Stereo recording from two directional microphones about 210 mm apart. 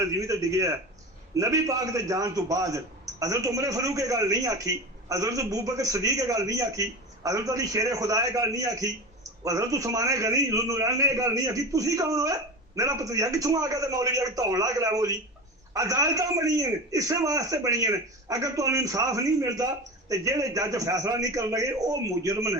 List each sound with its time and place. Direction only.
0.0 s a man's voice: 15° right (ahead or behind)